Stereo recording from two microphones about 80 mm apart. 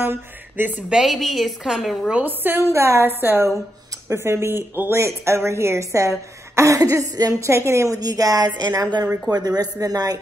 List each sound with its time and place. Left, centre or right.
0.0 s speech: right
0.9 s a woman's voice: centre
2.2 s a woman's voice: right